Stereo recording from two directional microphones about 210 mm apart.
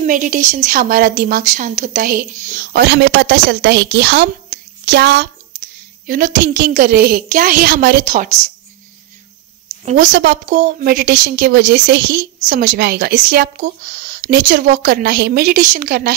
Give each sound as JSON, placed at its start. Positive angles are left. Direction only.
{"t": 0.0, "sound": "a woman's voice", "side_deg": -40}
{"t": 2.7, "sound": "a woman's voice", "side_deg": -55}
{"t": 4.5, "sound": "a sound", "side_deg": -50}
{"t": 6.0, "sound": "a woman's voice", "side_deg": -40}
{"t": 9.8, "sound": "a woman's voice", "side_deg": -40}